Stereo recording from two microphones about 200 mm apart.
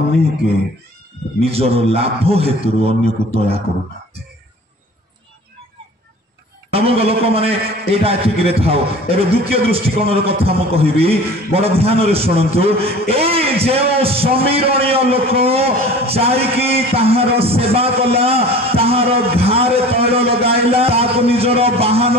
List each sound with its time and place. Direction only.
1.4 s a man's voice: 30° right (ahead or behind)
6.7 s a man's voice: 30° right (ahead or behind)